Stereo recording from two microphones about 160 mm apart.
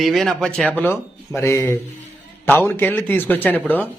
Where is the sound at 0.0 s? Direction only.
Centre (ahead or behind).